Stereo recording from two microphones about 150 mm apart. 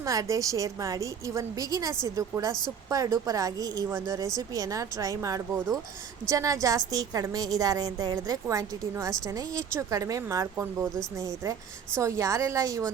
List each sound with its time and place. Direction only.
0.0 s a woman's voice: 20° right (ahead or behind)